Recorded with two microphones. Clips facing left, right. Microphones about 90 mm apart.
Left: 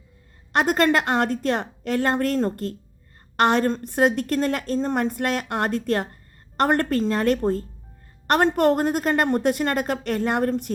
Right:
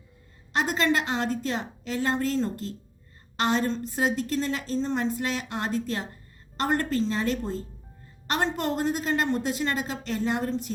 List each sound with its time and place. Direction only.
0.5 s a woman's voice: 55° left (ahead or behind)